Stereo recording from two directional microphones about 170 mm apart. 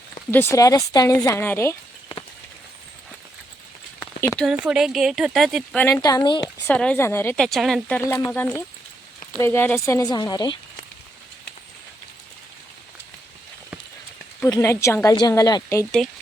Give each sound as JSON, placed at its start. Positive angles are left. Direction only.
{"t": 0.3, "sound": "speech", "side_deg": 10}
{"t": 4.0, "sound": "a sound", "side_deg": 15}
{"t": 4.6, "sound": "speech", "side_deg": -5}
{"t": 5.8, "sound": "speech", "side_deg": 20}
{"t": 6.7, "sound": "speech", "side_deg": 10}
{"t": 8.0, "sound": "speech", "side_deg": 15}
{"t": 14.4, "sound": "speech", "side_deg": 15}